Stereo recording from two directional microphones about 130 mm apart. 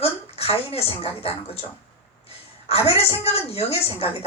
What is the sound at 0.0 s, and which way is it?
A woman's voice, 50° left (ahead or behind).